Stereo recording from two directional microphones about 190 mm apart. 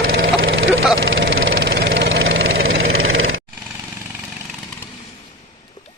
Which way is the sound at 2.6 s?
90° right.